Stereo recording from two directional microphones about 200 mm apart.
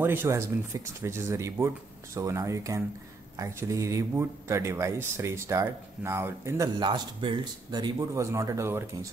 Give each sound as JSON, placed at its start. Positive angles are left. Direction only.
{"t": 0.0, "sound": "speech", "side_deg": -10}